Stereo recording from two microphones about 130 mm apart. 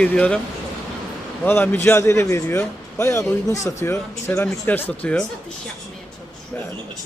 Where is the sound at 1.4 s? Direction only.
15° left (ahead or behind).